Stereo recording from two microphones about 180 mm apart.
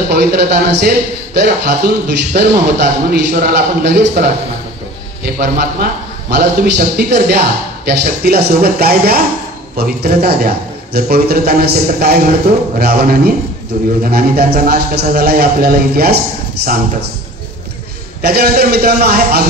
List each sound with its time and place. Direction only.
0.1 s a man's voice: 65° right (ahead or behind)
18.2 s a man's voice: 60° right (ahead or behind)